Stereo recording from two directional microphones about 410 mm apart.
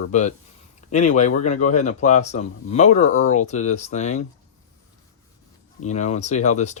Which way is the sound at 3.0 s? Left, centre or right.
Left.